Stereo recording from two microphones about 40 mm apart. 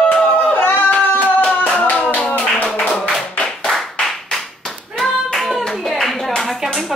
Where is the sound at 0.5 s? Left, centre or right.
Left.